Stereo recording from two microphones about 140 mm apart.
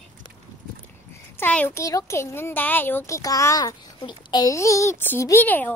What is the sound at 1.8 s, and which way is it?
A child's voice, 25° left (ahead or behind).